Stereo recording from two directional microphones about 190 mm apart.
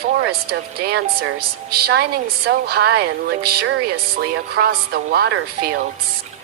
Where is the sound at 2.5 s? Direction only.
55° right (ahead or behind).